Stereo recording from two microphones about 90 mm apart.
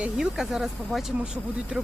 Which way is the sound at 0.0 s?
5° right (ahead or behind).